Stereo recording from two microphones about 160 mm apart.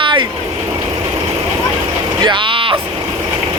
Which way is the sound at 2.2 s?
30° right (ahead or behind).